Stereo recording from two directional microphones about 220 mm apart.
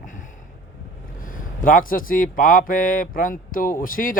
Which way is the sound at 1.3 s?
40° left (ahead or behind).